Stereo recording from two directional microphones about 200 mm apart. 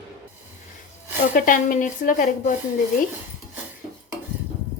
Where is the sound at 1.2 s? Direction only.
40° left (ahead or behind).